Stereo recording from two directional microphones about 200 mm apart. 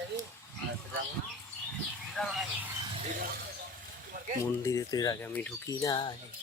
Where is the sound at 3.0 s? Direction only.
40° right (ahead or behind).